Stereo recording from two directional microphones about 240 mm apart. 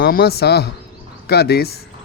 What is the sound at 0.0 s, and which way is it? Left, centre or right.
Speech, left.